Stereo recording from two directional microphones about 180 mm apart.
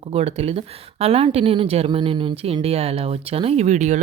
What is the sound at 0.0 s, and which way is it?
Speech, 35° right (ahead or behind).